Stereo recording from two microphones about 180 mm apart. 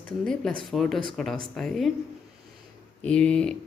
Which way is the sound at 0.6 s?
Centre (ahead or behind).